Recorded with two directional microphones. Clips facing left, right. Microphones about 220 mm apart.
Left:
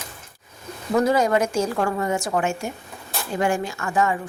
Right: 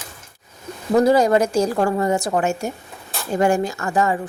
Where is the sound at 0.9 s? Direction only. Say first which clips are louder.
Right 4 dB; 35° right (ahead or behind).